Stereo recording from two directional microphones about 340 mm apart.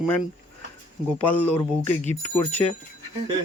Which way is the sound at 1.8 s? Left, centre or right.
Centre.